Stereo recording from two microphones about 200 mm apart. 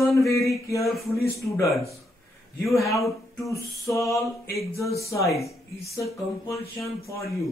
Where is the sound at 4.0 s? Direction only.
15° left (ahead or behind).